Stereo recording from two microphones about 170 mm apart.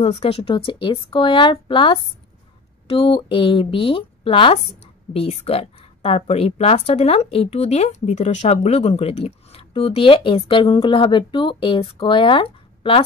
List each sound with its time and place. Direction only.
0.0 s speech: 35° left (ahead or behind)